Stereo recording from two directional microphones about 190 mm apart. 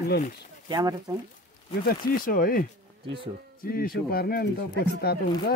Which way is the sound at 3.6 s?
50° left (ahead or behind).